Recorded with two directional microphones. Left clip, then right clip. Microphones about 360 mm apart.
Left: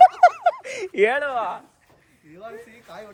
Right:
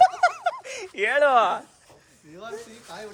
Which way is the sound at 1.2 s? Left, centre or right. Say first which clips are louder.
Right 7 dB; right.